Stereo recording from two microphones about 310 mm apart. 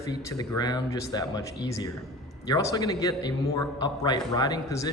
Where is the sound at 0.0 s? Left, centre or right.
Centre.